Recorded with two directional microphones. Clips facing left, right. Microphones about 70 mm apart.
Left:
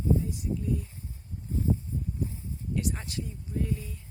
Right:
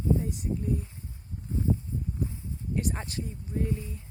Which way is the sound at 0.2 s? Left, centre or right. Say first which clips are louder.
Even; right.